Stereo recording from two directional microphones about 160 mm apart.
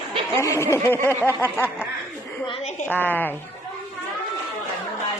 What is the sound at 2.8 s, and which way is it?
Speech, 10° left (ahead or behind).